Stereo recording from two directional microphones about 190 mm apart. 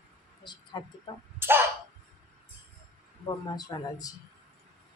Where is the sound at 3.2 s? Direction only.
20° left (ahead or behind).